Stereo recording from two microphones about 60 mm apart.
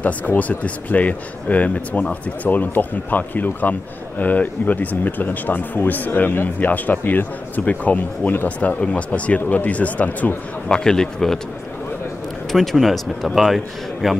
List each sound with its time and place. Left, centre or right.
0.0 s speech: left
10.7 s speech: centre
12.5 s speech: centre